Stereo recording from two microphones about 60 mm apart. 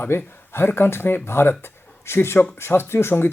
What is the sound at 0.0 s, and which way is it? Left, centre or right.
Speech, left.